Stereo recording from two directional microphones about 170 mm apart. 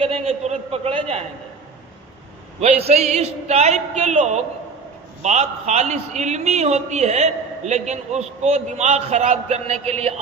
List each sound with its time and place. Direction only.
0.0 s a man's voice: 40° right (ahead or behind)
2.6 s a man's voice: 40° right (ahead or behind)